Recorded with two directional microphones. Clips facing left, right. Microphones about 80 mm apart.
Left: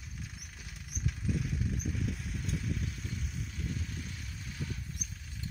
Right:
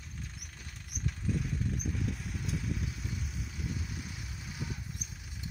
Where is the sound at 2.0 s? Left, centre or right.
Centre.